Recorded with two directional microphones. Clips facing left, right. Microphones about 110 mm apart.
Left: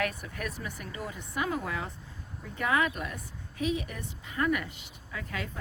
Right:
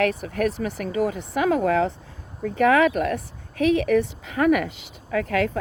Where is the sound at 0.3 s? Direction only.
65° right (ahead or behind).